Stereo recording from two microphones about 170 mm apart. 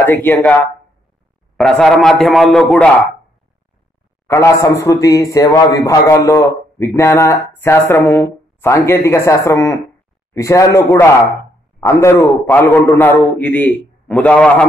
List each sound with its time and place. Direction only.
0.0 s a man's voice: 10° left (ahead or behind)
1.6 s speech: 5° left (ahead or behind)
4.3 s a man's voice: 15° left (ahead or behind)